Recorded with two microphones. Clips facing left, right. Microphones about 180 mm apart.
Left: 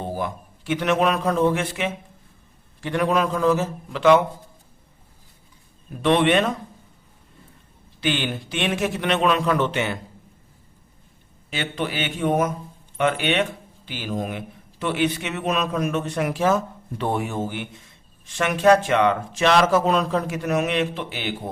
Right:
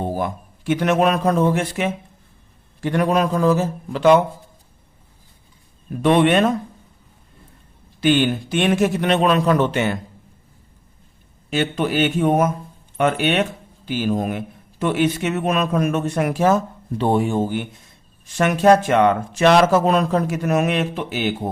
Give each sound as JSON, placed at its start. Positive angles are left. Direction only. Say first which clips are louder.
{"t": 0.2, "sound": "a man's voice", "louder": "right 3 dB", "side_deg": -45}
{"t": 6.0, "sound": "speech", "louder": "right 3 dB", "side_deg": -45}
{"t": 8.0, "sound": "speech", "louder": "right 8 dB", "side_deg": -45}
{"t": 11.5, "sound": "speech", "louder": "right 7 dB", "side_deg": -45}
{"t": 17.0, "sound": "speech", "louder": "right 6 dB", "side_deg": -30}
{"t": 18.3, "sound": "speech", "louder": "right 3 dB", "side_deg": -40}